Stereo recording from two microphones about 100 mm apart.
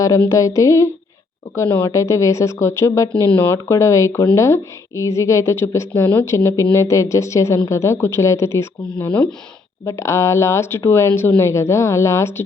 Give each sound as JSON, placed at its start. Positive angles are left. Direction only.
{"t": 0.3, "sound": "speech", "side_deg": 35}
{"t": 3.2, "sound": "speech", "side_deg": 20}
{"t": 9.8, "sound": "speech", "side_deg": 30}